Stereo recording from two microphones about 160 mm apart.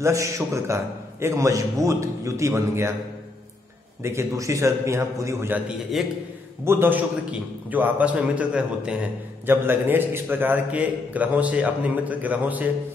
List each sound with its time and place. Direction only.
0.0 s a man's voice: 20° right (ahead or behind)
4.0 s a man's voice: 15° right (ahead or behind)